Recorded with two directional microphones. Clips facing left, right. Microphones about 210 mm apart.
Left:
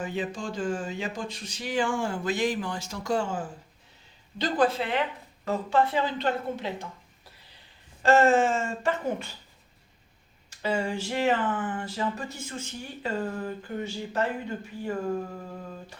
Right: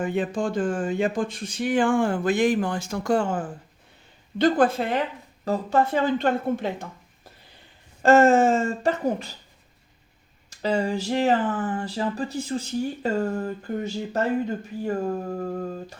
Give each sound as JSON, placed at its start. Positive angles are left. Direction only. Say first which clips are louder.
{"t": 0.0, "sound": "speech", "louder": "right 7 dB", "side_deg": -55}
{"t": 8.0, "sound": "speech", "louder": "right 4 dB", "side_deg": -45}
{"t": 10.5, "sound": "speech", "louder": "right 4 dB", "side_deg": -40}
{"t": 15.4, "sound": "speech", "louder": "right 10 dB", "side_deg": -50}